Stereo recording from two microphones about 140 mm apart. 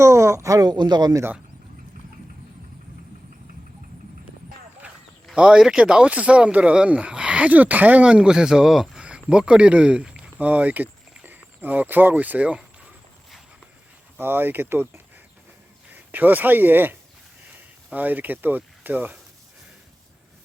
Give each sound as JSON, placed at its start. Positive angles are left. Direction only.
{"t": 0.0, "sound": "speech", "side_deg": -20}
{"t": 5.2, "sound": "speech", "side_deg": -5}
{"t": 14.2, "sound": "speech", "side_deg": -15}